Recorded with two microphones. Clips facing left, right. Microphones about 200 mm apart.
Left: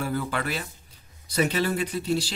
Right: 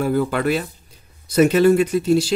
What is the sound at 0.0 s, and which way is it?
Speech, 45° right (ahead or behind).